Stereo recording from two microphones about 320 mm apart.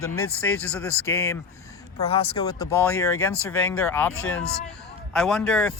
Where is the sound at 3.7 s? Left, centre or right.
Centre.